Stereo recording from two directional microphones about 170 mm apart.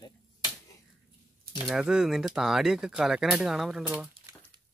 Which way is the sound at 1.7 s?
5° right (ahead or behind).